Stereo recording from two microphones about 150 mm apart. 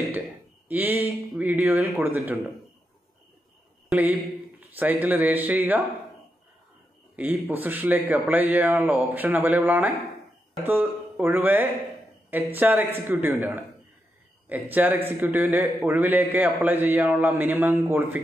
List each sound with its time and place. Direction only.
0.7 s a man's voice: 10° right (ahead or behind)
3.9 s a man's voice: 10° right (ahead or behind)
7.2 s a man's voice: 10° right (ahead or behind)